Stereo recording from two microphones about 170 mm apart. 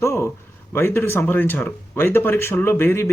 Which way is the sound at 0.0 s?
15° left (ahead or behind).